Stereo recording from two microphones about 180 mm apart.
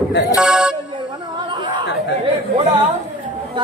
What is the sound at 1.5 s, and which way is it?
Chatter, 25° right (ahead or behind).